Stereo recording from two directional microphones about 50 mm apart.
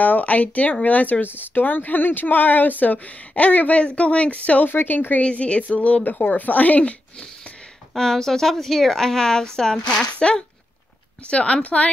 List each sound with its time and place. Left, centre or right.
0.0 s speech: left
4.6 s speech: left
5.2 s a woman's voice: left
6.0 s speech: left
7.9 s a woman's voice: centre; by 11.9 s left